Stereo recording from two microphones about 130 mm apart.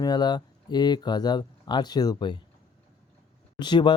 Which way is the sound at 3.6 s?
35° left (ahead or behind).